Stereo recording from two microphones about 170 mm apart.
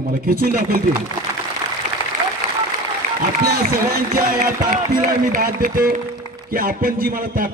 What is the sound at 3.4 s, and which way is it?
A man's voice, 60° right (ahead or behind).